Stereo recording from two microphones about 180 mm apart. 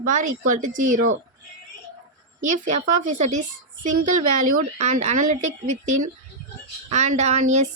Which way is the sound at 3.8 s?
45° right (ahead or behind).